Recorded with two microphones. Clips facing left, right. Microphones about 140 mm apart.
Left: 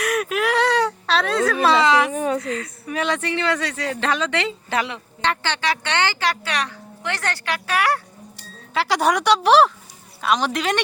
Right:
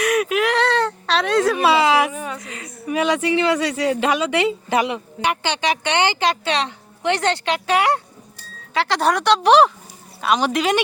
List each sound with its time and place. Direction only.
0.0 s speech: centre (ahead or behind)
2.1 s speech: 35° left (ahead or behind)
2.4 s speech: 15° right (ahead or behind)
8.7 s speech: 5° left (ahead or behind)